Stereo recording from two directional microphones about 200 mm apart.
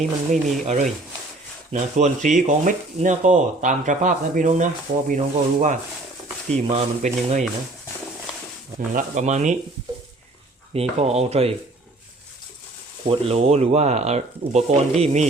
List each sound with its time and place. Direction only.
0.6 s speech: 35° right (ahead or behind)
9.0 s speech: 35° right (ahead or behind)
10.8 s speech: 30° right (ahead or behind)
13.1 s speech: 30° right (ahead or behind)